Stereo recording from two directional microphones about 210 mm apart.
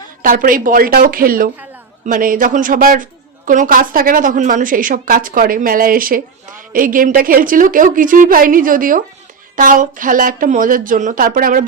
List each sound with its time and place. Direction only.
0.2 s a woman's voice: 40° right (ahead or behind)